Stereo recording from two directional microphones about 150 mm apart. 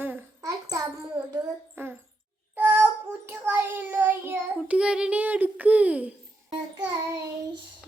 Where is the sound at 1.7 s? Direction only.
15° right (ahead or behind).